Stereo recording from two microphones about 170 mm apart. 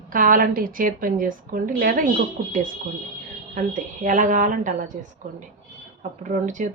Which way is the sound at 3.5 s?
50° right (ahead or behind).